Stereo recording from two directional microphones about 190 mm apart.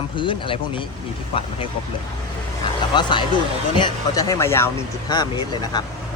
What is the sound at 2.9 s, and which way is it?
Speech, 25° left (ahead or behind).